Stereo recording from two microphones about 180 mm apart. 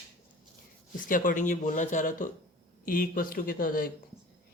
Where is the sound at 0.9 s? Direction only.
50° left (ahead or behind).